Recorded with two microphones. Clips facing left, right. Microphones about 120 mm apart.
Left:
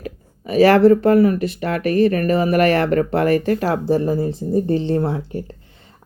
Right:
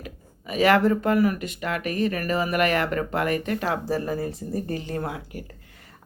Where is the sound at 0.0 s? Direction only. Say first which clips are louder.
Left 8 dB; 35° left (ahead or behind).